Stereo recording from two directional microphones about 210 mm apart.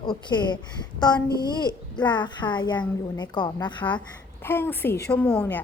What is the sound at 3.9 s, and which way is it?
A woman's voice, 10° left (ahead or behind).